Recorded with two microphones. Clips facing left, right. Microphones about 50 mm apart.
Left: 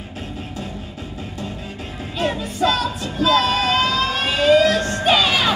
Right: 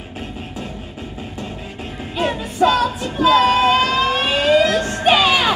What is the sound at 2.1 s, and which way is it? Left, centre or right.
Music, centre.